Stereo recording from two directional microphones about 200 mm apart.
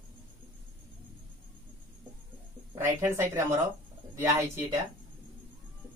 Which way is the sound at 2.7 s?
15° right (ahead or behind).